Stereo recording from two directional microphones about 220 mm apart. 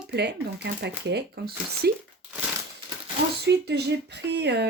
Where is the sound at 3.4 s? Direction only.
50° right (ahead or behind).